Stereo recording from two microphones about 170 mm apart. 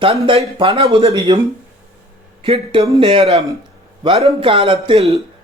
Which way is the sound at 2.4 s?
35° right (ahead or behind).